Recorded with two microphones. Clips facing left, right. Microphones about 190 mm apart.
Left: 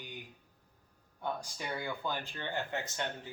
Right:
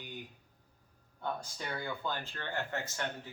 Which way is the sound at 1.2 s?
15° left (ahead or behind).